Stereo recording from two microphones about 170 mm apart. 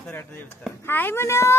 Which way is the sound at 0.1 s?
10° left (ahead or behind).